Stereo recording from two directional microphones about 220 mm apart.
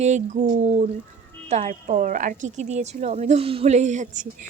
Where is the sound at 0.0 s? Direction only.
35° right (ahead or behind).